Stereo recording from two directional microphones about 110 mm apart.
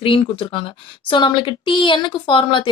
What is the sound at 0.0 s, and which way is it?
A woman's voice, 55° left (ahead or behind).